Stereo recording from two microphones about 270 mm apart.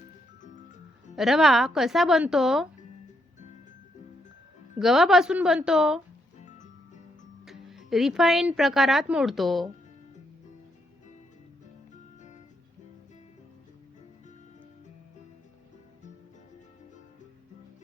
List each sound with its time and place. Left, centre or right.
1.1 s speech: centre
4.8 s speech: centre
7.4 s speech: centre